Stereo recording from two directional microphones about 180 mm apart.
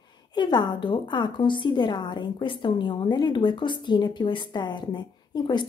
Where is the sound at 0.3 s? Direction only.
25° left (ahead or behind).